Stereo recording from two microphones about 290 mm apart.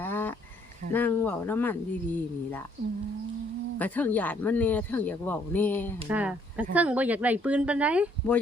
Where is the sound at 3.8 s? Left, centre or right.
Centre.